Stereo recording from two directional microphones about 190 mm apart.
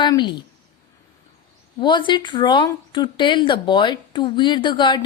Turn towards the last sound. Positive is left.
turn(degrees=25)  # may be behind; listen again after turning